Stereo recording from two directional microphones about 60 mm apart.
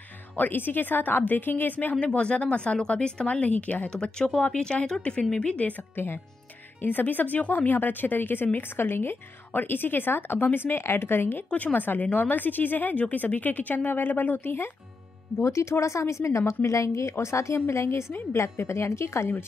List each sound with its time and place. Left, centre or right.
0.4 s speech: left
3.9 s speech: centre
5.9 s speech: left
11.5 s speech: left
15.3 s a woman's voice: left